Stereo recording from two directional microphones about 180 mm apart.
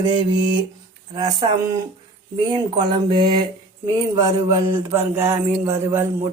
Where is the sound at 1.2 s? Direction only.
20° right (ahead or behind).